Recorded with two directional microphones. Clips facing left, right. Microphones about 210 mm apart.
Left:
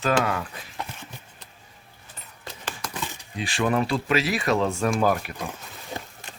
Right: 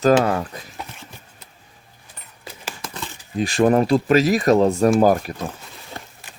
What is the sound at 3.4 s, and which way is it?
Speech, 40° right (ahead or behind).